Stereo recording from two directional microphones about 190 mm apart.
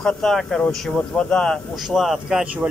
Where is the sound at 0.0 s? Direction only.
5° left (ahead or behind).